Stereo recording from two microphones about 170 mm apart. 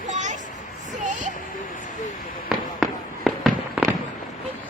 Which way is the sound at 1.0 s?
45° right (ahead or behind).